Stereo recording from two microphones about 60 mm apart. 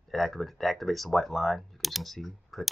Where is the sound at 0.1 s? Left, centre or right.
Centre.